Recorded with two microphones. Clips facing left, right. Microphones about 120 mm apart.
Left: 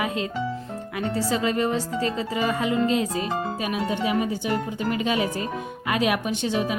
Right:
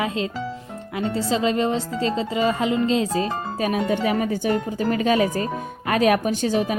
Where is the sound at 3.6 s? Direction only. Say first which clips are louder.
Right 8 dB; 45° right (ahead or behind).